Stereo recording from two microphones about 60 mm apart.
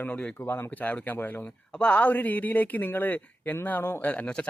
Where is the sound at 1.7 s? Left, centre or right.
Centre.